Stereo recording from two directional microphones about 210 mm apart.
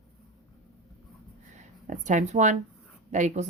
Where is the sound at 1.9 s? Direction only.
35° right (ahead or behind).